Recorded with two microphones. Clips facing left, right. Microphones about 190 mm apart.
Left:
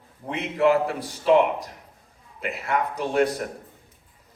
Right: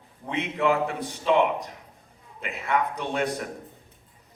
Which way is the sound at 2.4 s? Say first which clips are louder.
Left 2 dB; 40° left (ahead or behind).